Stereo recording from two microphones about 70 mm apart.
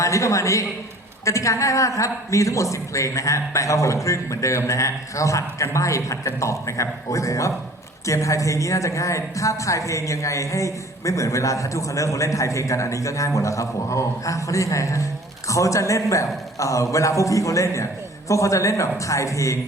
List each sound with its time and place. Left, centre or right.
0.0 s a woman's voice: left